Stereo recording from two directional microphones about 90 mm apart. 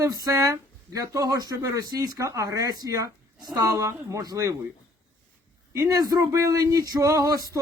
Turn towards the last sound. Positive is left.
turn(degrees=-45)  # may be behind; listen again after turning